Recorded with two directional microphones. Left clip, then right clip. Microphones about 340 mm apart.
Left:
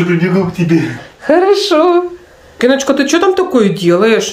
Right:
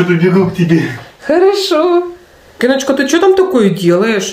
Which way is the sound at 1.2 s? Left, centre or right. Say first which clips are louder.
Left 1 dB; centre.